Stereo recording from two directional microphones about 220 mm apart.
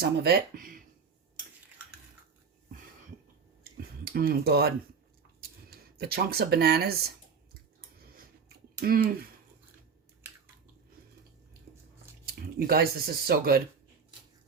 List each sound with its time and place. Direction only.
0.0 s speech: 45° right (ahead or behind)
4.0 s speech: 45° right (ahead or behind)
7.8 s a sound: 40° right (ahead or behind)
8.8 s speech: 45° right (ahead or behind)
12.5 s speech: 45° right (ahead or behind)